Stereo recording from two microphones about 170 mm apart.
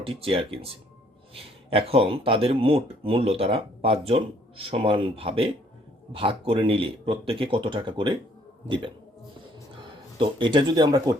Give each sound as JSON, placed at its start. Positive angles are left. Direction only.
{"t": 0.0, "sound": "speech", "side_deg": -30}
{"t": 9.7, "sound": "speech", "side_deg": -30}